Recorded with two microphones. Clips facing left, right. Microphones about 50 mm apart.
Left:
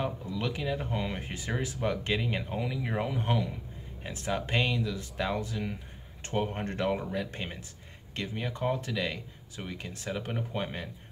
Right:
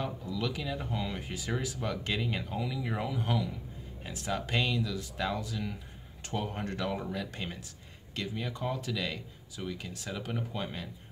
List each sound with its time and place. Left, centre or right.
0.0 s speech: left